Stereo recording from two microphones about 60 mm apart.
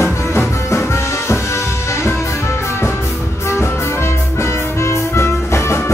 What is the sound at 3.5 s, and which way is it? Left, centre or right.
Music, left.